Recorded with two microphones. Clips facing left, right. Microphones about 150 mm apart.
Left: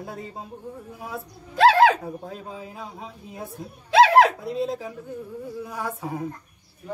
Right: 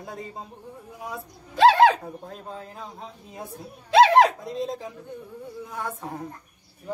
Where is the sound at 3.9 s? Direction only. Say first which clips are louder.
Even; centre (ahead or behind).